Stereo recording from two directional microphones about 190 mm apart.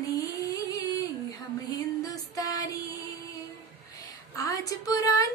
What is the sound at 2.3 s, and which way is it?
Music, 20° left (ahead or behind).